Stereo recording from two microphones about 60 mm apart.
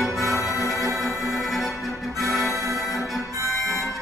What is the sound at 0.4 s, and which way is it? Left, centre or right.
Music, left.